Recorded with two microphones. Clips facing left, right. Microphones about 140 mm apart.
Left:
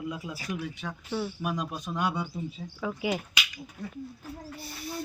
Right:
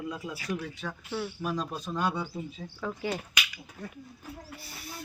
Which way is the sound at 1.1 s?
Centre (ahead or behind).